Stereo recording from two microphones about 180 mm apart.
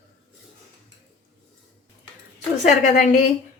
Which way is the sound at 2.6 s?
45° left (ahead or behind).